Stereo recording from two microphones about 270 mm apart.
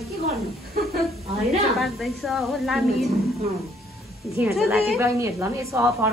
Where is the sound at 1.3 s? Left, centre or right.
Right.